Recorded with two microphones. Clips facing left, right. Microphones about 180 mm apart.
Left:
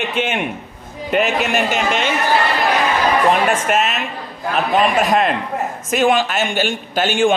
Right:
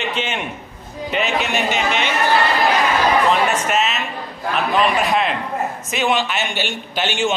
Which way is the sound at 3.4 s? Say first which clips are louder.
Left 2 dB; 50° left (ahead or behind).